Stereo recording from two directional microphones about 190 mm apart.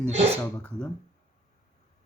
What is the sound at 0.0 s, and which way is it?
Speech, 35° right (ahead or behind).